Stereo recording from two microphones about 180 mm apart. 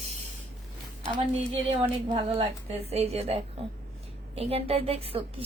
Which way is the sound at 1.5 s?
30° right (ahead or behind).